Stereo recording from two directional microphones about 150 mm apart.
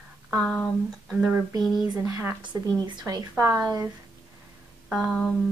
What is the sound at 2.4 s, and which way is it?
Speech, 30° right (ahead or behind).